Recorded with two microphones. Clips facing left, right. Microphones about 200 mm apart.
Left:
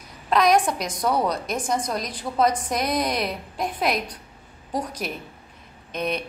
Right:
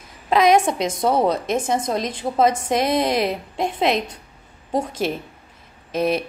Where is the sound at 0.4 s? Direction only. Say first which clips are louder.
Right 4 dB; 25° right (ahead or behind).